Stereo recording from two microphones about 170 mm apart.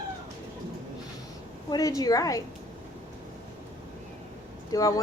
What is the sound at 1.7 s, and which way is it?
Speech, 20° left (ahead or behind).